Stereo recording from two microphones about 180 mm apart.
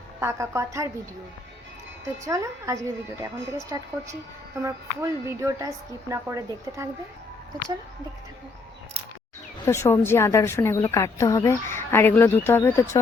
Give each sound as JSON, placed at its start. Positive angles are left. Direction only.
{"t": 0.2, "sound": "a woman's voice", "side_deg": -15}
{"t": 2.2, "sound": "a woman's voice", "side_deg": -15}
{"t": 9.6, "sound": "a woman's voice", "side_deg": 15}